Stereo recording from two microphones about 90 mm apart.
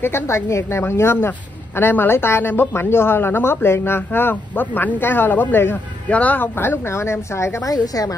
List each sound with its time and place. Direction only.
0.0 s speech: 30° left (ahead or behind)
7.7 s a woman's voice: 45° left (ahead or behind)